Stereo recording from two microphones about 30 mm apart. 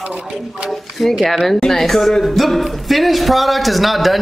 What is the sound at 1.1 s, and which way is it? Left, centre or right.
Speech, centre.